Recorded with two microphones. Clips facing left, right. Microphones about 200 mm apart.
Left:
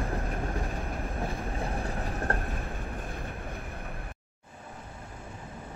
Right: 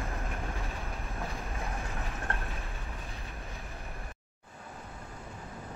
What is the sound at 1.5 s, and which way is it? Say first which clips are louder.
Train: left 5 dB; 35° left (ahead or behind).